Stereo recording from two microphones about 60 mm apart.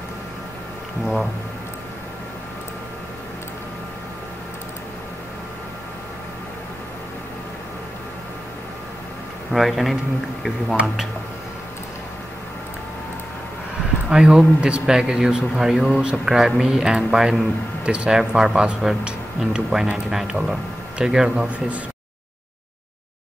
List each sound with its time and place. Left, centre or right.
9.5 s a man's voice: centre
14.0 s speech: centre
21.5 s speech: right